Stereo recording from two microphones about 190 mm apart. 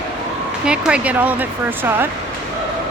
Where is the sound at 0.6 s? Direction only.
5° right (ahead or behind).